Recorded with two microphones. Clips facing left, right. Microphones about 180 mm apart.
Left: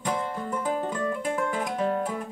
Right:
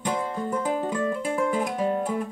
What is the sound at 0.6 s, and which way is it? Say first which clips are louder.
Music: right 1 dB; 5° right (ahead or behind).